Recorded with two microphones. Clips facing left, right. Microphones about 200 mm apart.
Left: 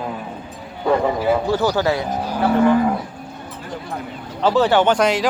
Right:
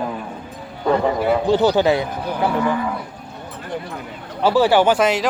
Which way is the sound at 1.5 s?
20° right (ahead or behind).